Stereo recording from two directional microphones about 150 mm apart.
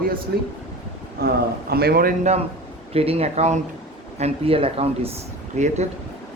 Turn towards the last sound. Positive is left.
turn(degrees=-50)  # may be behind; listen again after turning